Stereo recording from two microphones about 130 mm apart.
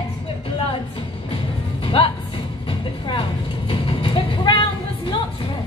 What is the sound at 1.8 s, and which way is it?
Music, 45° left (ahead or behind).